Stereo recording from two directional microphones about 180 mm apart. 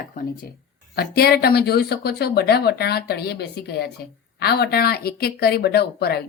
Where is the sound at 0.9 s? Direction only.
60° left (ahead or behind).